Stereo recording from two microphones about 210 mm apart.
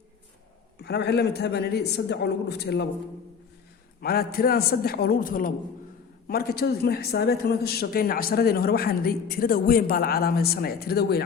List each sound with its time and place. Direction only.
0.8 s a man's voice: 50° left (ahead or behind)
4.0 s a man's voice: 45° left (ahead or behind)